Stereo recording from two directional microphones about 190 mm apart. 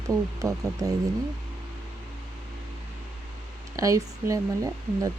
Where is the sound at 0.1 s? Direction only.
20° right (ahead or behind).